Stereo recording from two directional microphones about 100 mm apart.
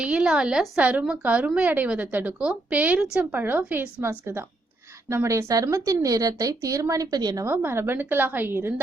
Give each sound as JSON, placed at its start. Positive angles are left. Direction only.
{"t": 0.0, "sound": "a woman's voice", "side_deg": -10}
{"t": 7.4, "sound": "a woman's voice", "side_deg": -20}